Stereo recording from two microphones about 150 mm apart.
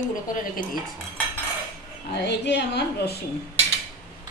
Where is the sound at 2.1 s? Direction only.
90° left.